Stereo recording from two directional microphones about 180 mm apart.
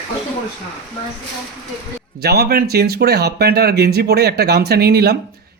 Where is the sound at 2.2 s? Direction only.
60° right (ahead or behind).